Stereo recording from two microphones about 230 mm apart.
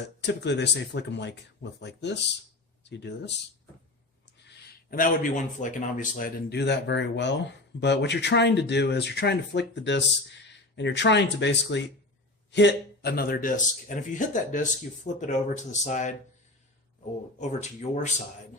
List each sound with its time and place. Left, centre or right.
0.2 s speech: left
4.9 s a man's voice: left
17.3 s a man's voice: left